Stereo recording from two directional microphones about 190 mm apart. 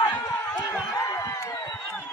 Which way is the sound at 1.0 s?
15° left (ahead or behind).